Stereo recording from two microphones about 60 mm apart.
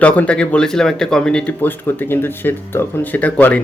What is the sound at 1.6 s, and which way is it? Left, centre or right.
Speech, left.